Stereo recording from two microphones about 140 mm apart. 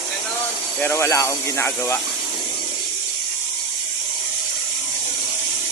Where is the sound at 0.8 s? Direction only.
20° left (ahead or behind).